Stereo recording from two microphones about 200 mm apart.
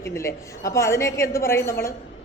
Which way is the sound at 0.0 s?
15° left (ahead or behind).